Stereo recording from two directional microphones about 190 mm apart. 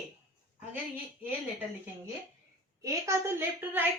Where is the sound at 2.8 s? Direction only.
15° right (ahead or behind).